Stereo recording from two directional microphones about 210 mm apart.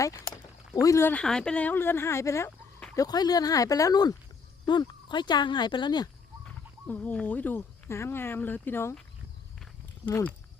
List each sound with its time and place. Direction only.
0.7 s speech: 15° left (ahead or behind)
6.8 s speech: 10° left (ahead or behind)
10.1 s speech: 10° left (ahead or behind)